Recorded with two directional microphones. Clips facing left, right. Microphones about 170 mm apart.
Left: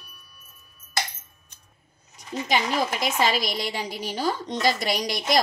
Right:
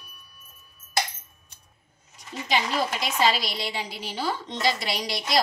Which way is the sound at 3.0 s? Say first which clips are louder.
Left 1 dB; 45° left (ahead or behind).